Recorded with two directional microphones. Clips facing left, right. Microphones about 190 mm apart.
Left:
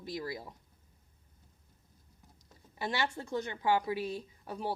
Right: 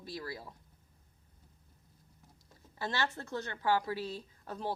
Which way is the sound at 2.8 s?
15° left (ahead or behind).